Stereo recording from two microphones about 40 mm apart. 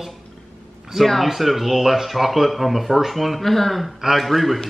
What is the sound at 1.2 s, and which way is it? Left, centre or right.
Speech, centre.